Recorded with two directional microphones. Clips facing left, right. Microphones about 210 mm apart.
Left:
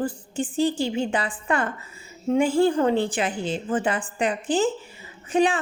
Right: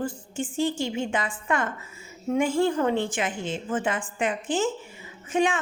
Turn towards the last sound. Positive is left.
turn(degrees=35)  # may be behind; listen again after turning